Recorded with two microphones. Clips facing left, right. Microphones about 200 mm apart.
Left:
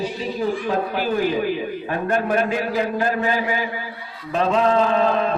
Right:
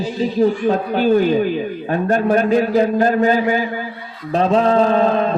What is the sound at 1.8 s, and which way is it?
A man's voice, 35° right (ahead or behind).